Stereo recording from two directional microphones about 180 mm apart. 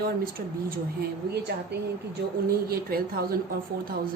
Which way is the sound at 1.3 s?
65° right (ahead or behind).